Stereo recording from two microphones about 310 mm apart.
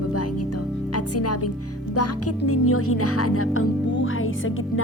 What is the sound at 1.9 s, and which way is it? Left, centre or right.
Speech, left.